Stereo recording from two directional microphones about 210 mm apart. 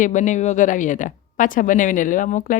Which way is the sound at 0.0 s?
35° left (ahead or behind).